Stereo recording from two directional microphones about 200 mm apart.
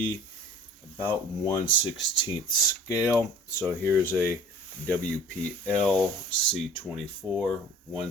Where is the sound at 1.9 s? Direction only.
20° left (ahead or behind).